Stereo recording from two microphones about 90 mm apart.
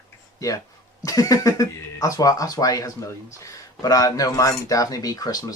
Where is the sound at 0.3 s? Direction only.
40° left (ahead or behind).